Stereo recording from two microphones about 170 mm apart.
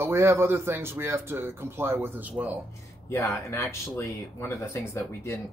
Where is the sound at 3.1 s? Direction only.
15° left (ahead or behind).